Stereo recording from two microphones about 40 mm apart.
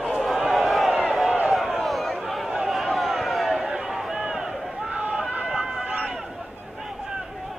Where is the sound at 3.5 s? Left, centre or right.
Centre.